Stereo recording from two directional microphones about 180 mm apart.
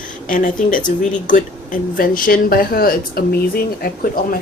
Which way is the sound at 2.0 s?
50° left (ahead or behind).